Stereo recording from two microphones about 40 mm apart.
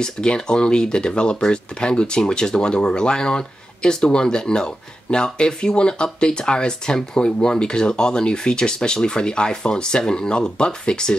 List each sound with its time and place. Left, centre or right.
0.0 s speech: left